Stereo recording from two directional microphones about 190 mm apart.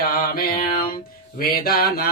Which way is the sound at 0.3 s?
50° left (ahead or behind).